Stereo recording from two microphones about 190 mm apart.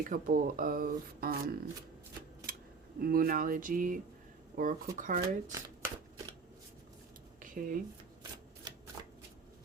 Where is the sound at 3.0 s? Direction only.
50° right (ahead or behind).